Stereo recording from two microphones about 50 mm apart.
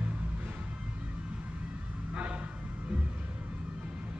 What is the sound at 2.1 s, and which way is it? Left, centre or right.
Vehicle, right.